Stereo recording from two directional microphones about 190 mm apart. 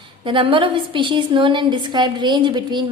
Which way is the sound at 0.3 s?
25° right (ahead or behind).